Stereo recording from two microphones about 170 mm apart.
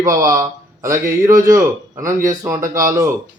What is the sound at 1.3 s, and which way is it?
Speech, 50° right (ahead or behind).